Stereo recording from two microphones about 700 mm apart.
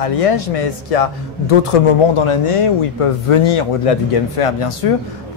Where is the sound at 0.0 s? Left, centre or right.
Left.